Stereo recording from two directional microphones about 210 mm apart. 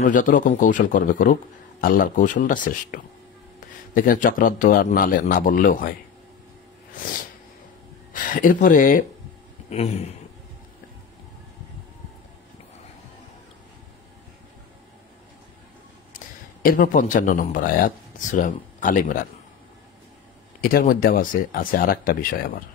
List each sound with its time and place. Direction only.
0.0 s a man's voice: 40° left (ahead or behind)
8.1 s speech: 40° left (ahead or behind)
9.7 s a sound: 30° left (ahead or behind)
16.6 s a man's voice: 40° left (ahead or behind)
20.6 s speech: 40° left (ahead or behind)